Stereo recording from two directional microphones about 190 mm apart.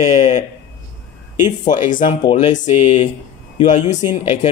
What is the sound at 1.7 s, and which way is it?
Speech, 45° left (ahead or behind).